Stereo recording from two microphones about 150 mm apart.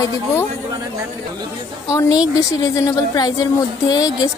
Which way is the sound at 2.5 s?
25° left (ahead or behind).